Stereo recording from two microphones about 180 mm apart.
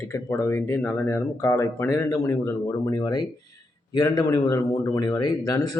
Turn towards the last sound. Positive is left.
turn(degrees=20)  # may be behind; listen again after turning